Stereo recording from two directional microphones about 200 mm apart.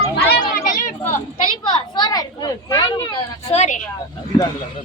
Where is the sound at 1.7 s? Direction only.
20° left (ahead or behind).